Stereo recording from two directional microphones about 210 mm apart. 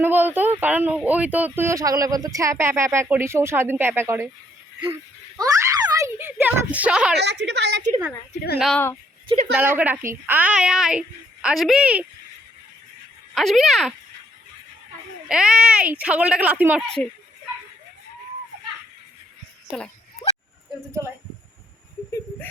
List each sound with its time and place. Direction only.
0.0 s speech: 10° right (ahead or behind)
5.4 s a child's voice: 15° right (ahead or behind)
7.2 s a woman's voice: 55° right (ahead or behind)
8.5 s speech: centre (ahead or behind)
9.2 s a woman's voice: 30° right (ahead or behind)
9.6 s speech: 10° right (ahead or behind)
13.3 s speech: centre (ahead or behind)
15.3 s speech: 5° right (ahead or behind)